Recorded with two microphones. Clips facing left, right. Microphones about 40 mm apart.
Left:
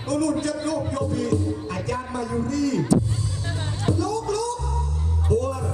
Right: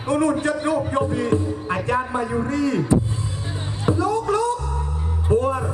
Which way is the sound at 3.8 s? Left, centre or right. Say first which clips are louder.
Right 4 dB; right.